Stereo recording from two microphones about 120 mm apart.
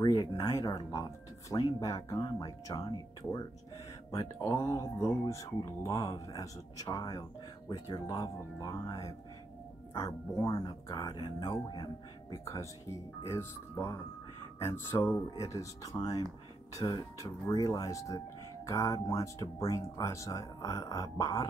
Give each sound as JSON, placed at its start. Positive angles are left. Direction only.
{"t": 0.4, "sound": "speech", "side_deg": 25}
{"t": 13.2, "sound": "speech", "side_deg": 25}